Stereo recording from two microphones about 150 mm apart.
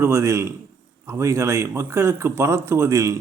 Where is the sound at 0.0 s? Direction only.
20° right (ahead or behind).